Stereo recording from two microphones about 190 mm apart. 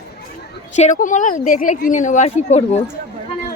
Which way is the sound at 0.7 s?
40° left (ahead or behind).